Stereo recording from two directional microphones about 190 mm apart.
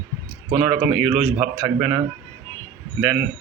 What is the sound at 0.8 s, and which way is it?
Speech, 5° right (ahead or behind).